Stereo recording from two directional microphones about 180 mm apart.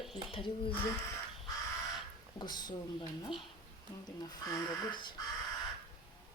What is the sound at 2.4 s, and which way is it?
Speech, 25° left (ahead or behind).